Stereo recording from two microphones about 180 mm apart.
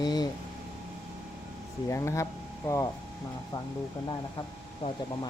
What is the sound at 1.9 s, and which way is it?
Speech, 15° left (ahead or behind).